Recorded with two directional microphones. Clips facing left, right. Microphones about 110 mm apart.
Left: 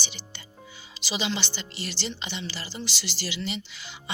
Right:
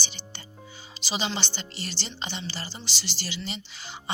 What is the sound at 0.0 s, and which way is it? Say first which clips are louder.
Music: even; 35° right (ahead or behind).